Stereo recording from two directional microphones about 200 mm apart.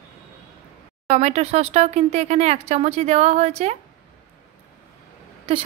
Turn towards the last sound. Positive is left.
turn(degrees=-30)  # may be behind; listen again after turning